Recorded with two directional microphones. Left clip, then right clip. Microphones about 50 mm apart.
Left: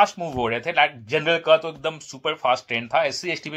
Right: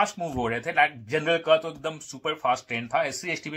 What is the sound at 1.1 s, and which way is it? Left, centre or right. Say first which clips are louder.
Speech: left 5 dB; right.